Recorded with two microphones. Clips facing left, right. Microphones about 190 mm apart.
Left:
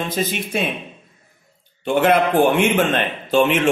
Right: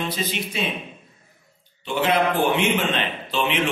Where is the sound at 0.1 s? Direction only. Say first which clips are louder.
Left 5 dB; 50° left (ahead or behind).